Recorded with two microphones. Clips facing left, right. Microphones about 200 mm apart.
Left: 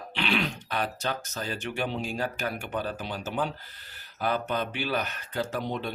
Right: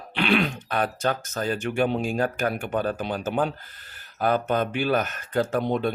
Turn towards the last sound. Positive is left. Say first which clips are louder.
# right 7 dB
turn(degrees=-55)  # may be behind; listen again after turning